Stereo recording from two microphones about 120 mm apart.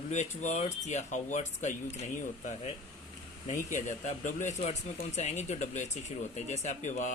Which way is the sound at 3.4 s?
85° left.